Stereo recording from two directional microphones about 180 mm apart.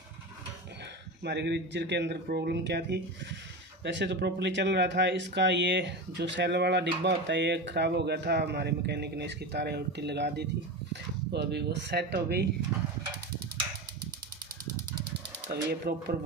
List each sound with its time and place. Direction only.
1.2 s speech: 70° right (ahead or behind)
15.5 s speech: 65° right (ahead or behind)